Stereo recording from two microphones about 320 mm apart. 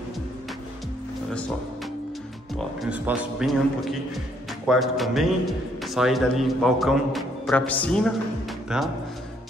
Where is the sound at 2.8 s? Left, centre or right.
Centre.